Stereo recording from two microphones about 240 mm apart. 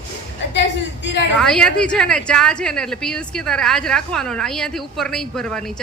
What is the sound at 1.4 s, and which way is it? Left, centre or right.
A woman's voice, centre.